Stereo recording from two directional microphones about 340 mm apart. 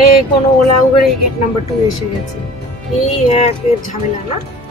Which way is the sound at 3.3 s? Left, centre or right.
Centre.